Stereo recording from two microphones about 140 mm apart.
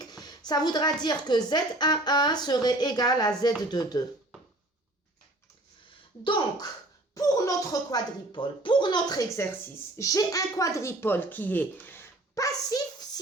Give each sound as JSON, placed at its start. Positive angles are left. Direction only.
{"t": 0.0, "sound": "speech", "side_deg": 30}
{"t": 6.2, "sound": "speech", "side_deg": 35}
{"t": 7.1, "sound": "speech", "side_deg": 25}